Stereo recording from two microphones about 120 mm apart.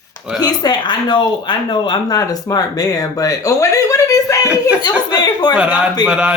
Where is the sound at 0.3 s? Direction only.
35° left (ahead or behind).